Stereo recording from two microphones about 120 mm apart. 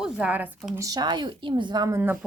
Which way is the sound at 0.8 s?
30° right (ahead or behind).